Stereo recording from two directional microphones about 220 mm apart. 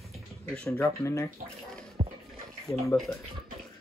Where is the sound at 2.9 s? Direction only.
15° left (ahead or behind).